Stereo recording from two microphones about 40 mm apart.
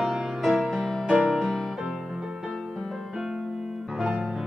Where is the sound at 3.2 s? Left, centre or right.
Centre.